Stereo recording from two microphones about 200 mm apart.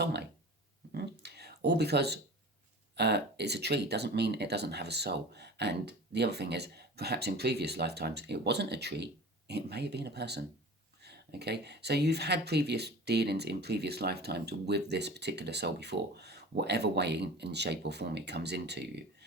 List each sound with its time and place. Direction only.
0.0 s speech: 55° right (ahead or behind)
0.9 s a sound: 55° right (ahead or behind)
2.9 s speech: 55° right (ahead or behind)